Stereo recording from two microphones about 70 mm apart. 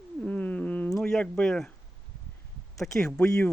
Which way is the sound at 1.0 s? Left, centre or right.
Centre.